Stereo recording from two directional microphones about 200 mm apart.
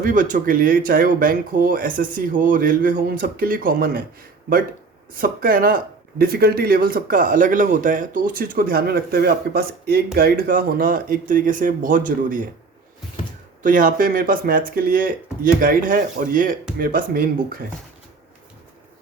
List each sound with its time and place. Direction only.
0.0 s speech: 40° right (ahead or behind)
5.1 s speech: 45° right (ahead or behind)
13.6 s speech: 45° right (ahead or behind)